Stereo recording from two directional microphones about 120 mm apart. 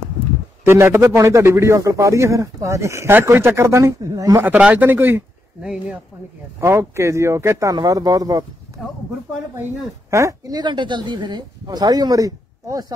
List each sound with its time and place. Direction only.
0.7 s speech: 20° right (ahead or behind)
4.4 s speech: 15° right (ahead or behind)
5.6 s speech: 5° right (ahead or behind)
6.6 s speech: 20° right (ahead or behind)
10.1 s speech: 25° right (ahead or behind)
10.6 s a woman's voice: 40° right (ahead or behind)